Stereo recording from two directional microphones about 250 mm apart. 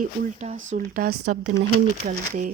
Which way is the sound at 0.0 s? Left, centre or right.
Right.